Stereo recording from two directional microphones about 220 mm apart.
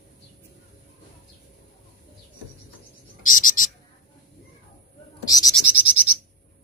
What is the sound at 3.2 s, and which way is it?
Frog, 35° left (ahead or behind).